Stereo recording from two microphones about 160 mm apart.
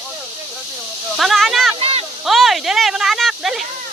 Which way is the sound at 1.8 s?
40° right (ahead or behind).